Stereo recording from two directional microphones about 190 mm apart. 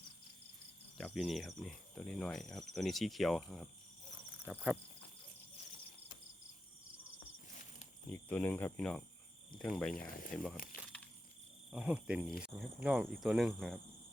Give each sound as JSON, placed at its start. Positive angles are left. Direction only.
{"t": 0.9, "sound": "speech", "side_deg": 0}
{"t": 4.4, "sound": "cricket", "side_deg": -5}
{"t": 8.1, "sound": "speech", "side_deg": 10}
{"t": 9.9, "sound": "speech", "side_deg": 50}
{"t": 10.3, "sound": "speech", "side_deg": 0}
{"t": 10.8, "sound": "a sound", "side_deg": 5}
{"t": 11.7, "sound": "speech", "side_deg": -5}